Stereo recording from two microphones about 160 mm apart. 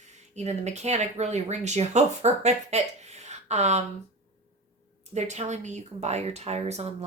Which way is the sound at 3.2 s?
45° right (ahead or behind).